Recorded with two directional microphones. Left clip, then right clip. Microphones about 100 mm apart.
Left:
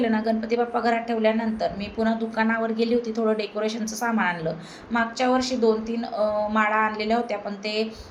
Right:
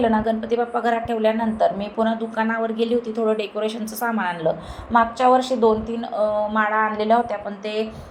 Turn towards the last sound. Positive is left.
turn(degrees=-15)  # may be behind; listen again after turning